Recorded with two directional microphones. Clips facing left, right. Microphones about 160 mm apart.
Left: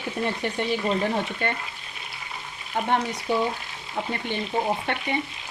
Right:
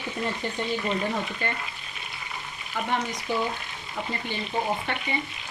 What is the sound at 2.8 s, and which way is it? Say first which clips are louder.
Frying: left 4 dB; 55° left (ahead or behind).